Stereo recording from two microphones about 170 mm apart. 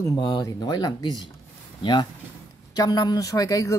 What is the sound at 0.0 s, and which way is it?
Speech, 20° left (ahead or behind).